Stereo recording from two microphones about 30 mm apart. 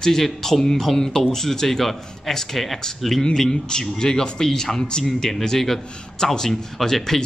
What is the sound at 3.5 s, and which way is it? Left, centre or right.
A man's voice, left.